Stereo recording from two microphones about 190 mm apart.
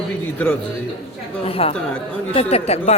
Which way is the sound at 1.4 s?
30° left (ahead or behind).